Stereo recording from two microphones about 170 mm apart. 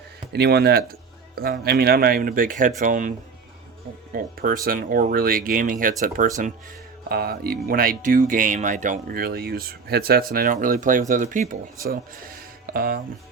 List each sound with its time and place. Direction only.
0.3 s speech: 70° right (ahead or behind); by 6.5 s 50° right (ahead or behind)
7.1 s speech: 60° right (ahead or behind)